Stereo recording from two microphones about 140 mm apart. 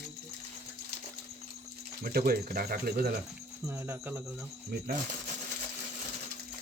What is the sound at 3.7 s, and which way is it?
Speech, 15° right (ahead or behind).